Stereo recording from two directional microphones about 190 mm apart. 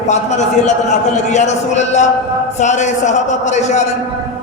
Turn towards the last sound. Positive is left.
turn(degrees=40)  # may be behind; listen again after turning